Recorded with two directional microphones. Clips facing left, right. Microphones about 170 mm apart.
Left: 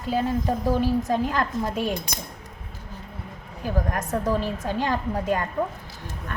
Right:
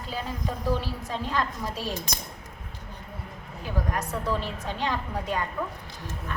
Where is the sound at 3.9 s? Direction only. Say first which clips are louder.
Left 4 dB; 45° left (ahead or behind).